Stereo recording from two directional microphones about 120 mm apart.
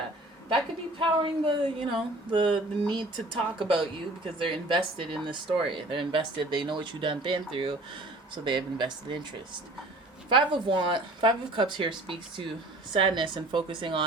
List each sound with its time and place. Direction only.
0.9 s speech: 45° right (ahead or behind)
10.2 s speech: 45° right (ahead or behind)